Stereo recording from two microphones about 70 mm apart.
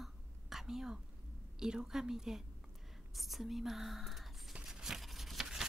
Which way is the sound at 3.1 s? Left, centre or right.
Centre.